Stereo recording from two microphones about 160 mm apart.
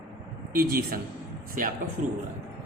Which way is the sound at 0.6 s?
65° right (ahead or behind).